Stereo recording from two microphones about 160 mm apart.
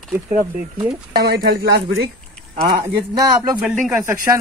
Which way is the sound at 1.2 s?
85° right.